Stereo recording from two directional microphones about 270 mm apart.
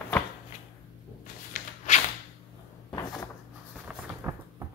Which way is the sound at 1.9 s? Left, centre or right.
Left.